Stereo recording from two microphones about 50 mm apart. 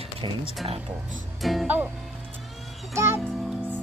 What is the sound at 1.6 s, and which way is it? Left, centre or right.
Speech, right.